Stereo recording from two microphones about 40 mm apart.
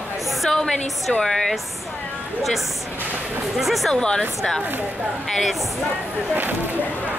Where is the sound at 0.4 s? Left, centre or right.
Centre.